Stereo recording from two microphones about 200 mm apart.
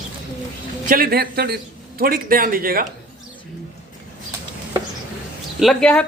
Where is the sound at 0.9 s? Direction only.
45° right (ahead or behind).